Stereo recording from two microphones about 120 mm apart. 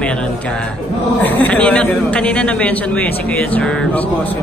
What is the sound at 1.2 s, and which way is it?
A man's voice, 15° left (ahead or behind).